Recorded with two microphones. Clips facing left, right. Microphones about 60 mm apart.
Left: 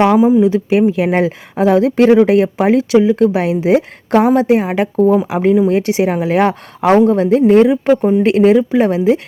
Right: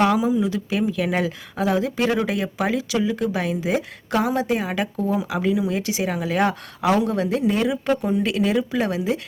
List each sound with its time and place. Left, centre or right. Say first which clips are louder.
0.0 s a woman's voice: left 9 dB; left
1.6 s a woman's voice: left 11 dB; left
3.7 s a woman's voice: left 11 dB; left
7.3 s a woman's voice: left 12 dB; left